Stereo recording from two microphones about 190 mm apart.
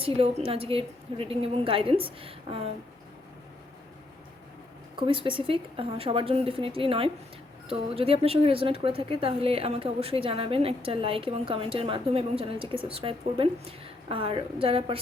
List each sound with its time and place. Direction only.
0.0 s a woman's voice: 30° right (ahead or behind)
4.9 s a woman's voice: 25° right (ahead or behind)